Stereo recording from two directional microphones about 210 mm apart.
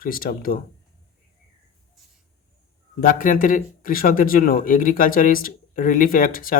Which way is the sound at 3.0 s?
40° left (ahead or behind).